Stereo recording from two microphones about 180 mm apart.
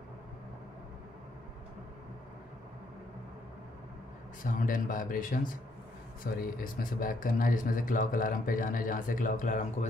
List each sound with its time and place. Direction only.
4.4 s speech: 50° left (ahead or behind)